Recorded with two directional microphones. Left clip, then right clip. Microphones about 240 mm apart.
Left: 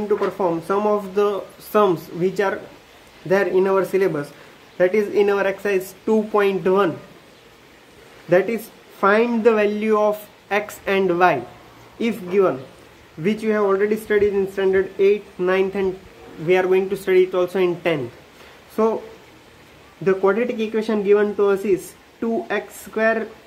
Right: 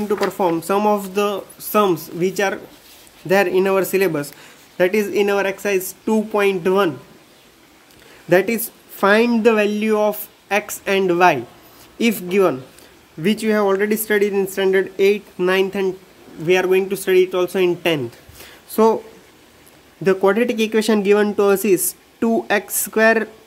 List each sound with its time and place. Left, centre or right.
0.1 s speech: right
8.3 s speech: right
20.1 s speech: right